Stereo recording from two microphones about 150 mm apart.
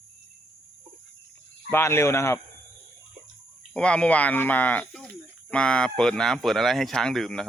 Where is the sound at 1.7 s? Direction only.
15° left (ahead or behind).